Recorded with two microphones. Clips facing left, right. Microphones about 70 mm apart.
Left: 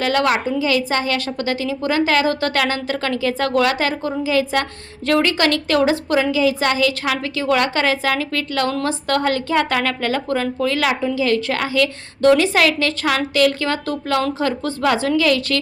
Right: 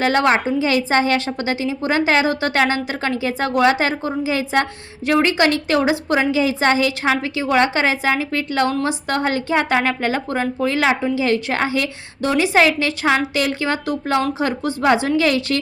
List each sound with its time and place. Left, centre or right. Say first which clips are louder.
0.0 s a woman's voice: right 2 dB; right